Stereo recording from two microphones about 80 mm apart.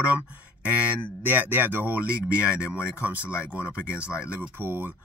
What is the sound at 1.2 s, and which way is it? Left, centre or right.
Speech, right.